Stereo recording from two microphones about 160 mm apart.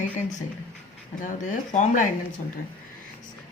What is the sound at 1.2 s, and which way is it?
Speech, 50° left (ahead or behind).